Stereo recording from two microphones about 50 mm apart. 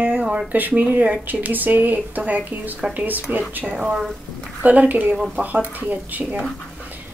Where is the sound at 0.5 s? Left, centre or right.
Right.